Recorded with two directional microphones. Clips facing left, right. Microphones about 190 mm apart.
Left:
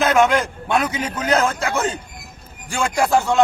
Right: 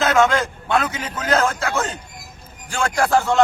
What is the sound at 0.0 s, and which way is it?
Speech, 15° left (ahead or behind).